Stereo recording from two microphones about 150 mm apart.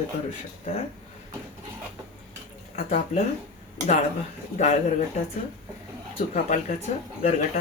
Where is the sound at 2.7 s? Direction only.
45° left (ahead or behind).